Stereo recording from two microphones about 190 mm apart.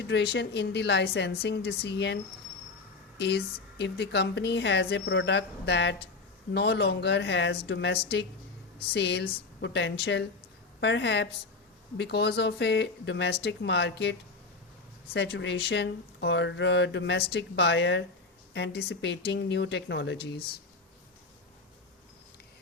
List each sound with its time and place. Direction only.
0.1 s speech: 60° left (ahead or behind)
3.2 s speech: 60° left (ahead or behind)